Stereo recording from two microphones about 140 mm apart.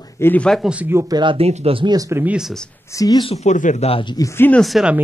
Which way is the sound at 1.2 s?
40° right (ahead or behind).